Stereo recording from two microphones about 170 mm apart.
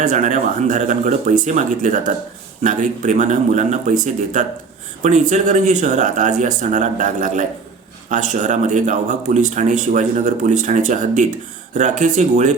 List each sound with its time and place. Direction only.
0.0 s speech: 45° right (ahead or behind)